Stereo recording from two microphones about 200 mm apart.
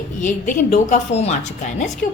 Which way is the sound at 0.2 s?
40° left (ahead or behind).